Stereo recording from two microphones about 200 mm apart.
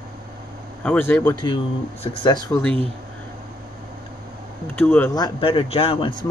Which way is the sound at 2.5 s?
5° left (ahead or behind).